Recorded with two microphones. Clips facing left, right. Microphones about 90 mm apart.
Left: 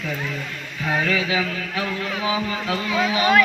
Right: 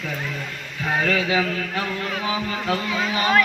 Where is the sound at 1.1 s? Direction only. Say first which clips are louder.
Right 1 dB; 40° right (ahead or behind).